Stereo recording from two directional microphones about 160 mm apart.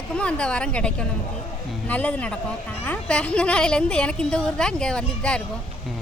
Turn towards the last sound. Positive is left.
turn(degrees=5)  # may be behind; listen again after turning